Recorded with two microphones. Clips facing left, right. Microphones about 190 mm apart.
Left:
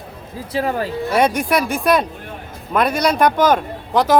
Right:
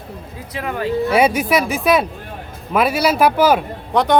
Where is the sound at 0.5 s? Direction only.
35° left (ahead or behind).